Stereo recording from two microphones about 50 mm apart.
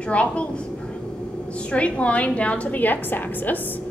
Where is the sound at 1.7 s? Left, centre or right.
Left.